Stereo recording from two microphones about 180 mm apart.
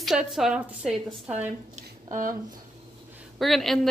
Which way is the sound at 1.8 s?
50° right (ahead or behind).